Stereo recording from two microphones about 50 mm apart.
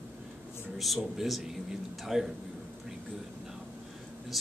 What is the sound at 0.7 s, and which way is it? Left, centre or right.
Speech, centre.